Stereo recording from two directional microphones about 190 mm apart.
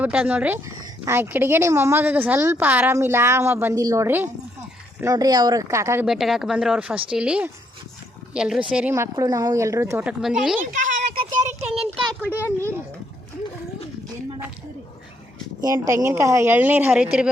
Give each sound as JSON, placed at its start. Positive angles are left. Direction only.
{"t": 0.0, "sound": "a woman's voice", "side_deg": -5}
{"t": 6.1, "sound": "a woman's voice", "side_deg": 0}
{"t": 10.7, "sound": "a sound", "side_deg": -45}
{"t": 12.4, "sound": "speech", "side_deg": 15}
{"t": 15.6, "sound": "a woman's voice", "side_deg": -15}